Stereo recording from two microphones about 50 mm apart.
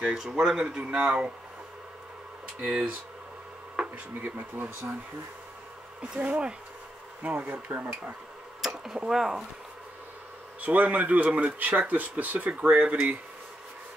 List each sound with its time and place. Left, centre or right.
0.0 s speech: centre
2.6 s speech: centre
4.2 s speech: right
6.1 s speech: right
7.2 s speech: right
7.5 s speech: right
8.5 s tick-tock: centre
8.9 s speech: centre
10.6 s speech: right